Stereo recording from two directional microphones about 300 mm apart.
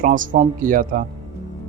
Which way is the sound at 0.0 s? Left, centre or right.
Right.